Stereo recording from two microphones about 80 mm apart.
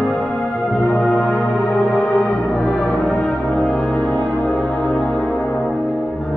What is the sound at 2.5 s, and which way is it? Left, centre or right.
Brass instrument, centre.